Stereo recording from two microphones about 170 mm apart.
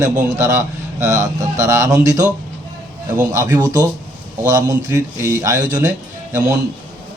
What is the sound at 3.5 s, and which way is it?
A man's voice, 20° right (ahead or behind).